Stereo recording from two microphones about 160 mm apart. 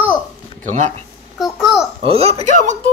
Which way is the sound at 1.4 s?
Centre (ahead or behind).